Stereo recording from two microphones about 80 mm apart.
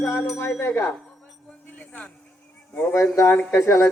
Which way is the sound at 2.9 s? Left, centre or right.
Left.